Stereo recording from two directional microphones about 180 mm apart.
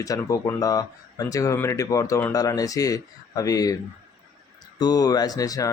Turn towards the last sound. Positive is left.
turn(degrees=20)  # may be behind; listen again after turning